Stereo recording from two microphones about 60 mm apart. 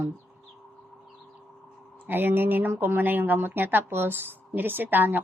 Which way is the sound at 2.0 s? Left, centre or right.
Right.